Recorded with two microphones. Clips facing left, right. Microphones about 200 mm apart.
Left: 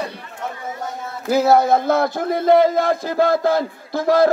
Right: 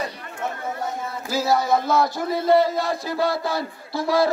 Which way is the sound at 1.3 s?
60° left (ahead or behind).